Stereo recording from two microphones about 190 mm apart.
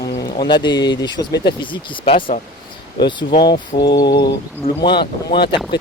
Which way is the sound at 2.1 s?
45° left (ahead or behind).